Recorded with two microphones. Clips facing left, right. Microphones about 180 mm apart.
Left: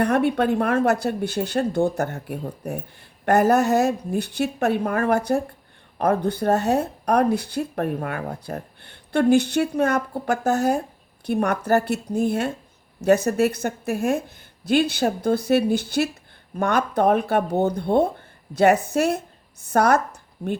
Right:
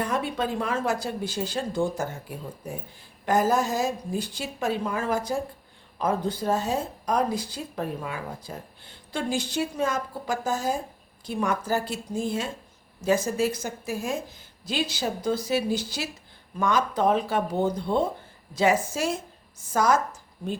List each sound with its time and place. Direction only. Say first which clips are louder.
0.0 s speech: left 8 dB; 65° left (ahead or behind)